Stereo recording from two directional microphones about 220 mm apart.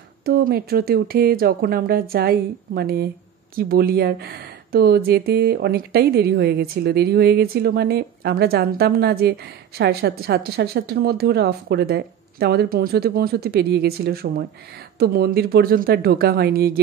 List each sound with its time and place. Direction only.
0.2 s speech: 45° right (ahead or behind)